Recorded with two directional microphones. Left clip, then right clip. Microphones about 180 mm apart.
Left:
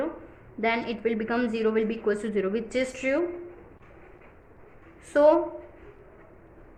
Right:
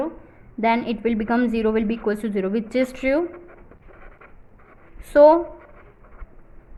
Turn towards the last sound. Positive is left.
turn(degrees=-35)  # may be behind; listen again after turning